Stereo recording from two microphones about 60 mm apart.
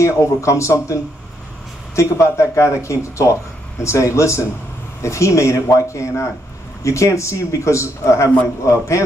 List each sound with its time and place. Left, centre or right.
0.0 s a man's voice: left